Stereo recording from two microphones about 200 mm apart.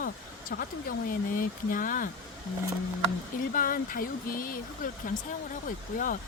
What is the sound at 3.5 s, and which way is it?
Speech, 40° left (ahead or behind).